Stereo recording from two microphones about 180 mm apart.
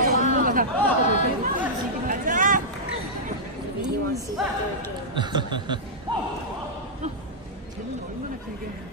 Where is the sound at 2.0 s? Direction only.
50° right (ahead or behind).